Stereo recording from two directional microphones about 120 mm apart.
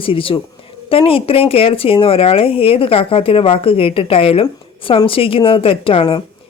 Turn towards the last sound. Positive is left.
turn(degrees=50)  # may be behind; listen again after turning